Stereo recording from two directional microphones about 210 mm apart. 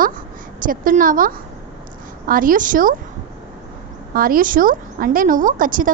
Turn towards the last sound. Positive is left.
turn(degrees=-40)  # may be behind; listen again after turning